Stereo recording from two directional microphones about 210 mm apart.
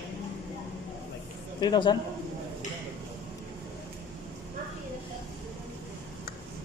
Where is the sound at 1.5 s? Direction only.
20° left (ahead or behind).